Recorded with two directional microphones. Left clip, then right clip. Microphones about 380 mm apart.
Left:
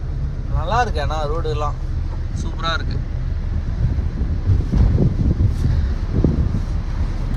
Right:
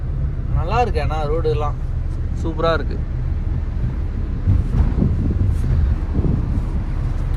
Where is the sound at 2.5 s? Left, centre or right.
Centre.